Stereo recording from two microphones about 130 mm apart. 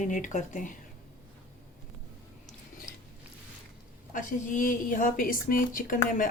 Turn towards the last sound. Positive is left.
turn(degrees=90)